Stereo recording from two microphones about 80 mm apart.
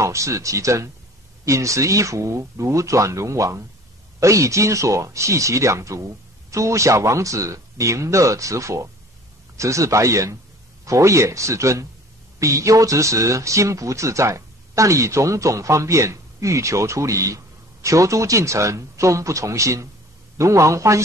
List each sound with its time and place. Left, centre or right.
0.0 s speech: right